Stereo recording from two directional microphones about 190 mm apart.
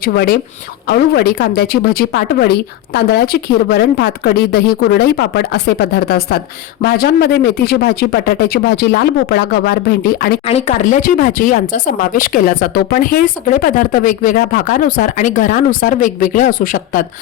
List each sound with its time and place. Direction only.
0.0 s a man's voice: 55° left (ahead or behind)
10.5 s speech: 40° left (ahead or behind)